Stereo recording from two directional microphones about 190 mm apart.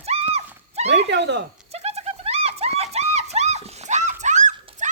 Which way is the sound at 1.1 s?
65° right (ahead or behind).